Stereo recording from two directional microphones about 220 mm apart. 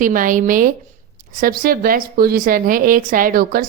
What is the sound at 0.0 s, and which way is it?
A woman's voice, 40° right (ahead or behind).